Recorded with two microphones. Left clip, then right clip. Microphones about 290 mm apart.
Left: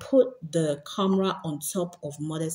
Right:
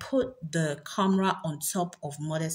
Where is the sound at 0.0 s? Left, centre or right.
Right.